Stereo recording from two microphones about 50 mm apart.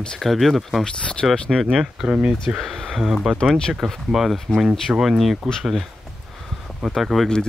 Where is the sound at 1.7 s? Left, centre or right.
Centre.